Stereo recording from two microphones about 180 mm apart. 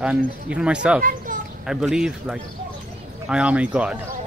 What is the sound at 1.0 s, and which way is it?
Children playing, 50° right (ahead or behind).